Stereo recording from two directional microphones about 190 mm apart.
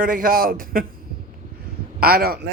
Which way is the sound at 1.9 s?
50° right (ahead or behind).